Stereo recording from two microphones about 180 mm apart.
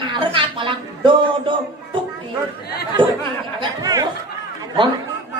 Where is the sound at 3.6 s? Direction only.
20° right (ahead or behind).